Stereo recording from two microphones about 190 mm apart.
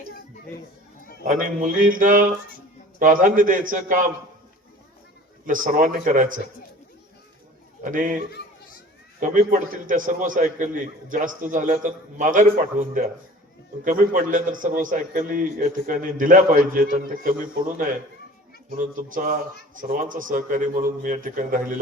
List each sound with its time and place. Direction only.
1.2 s a man's voice: 45° right (ahead or behind)
5.5 s a man's voice: 45° right (ahead or behind)
7.8 s a man's voice: 45° right (ahead or behind)
9.2 s a man's voice: 45° right (ahead or behind)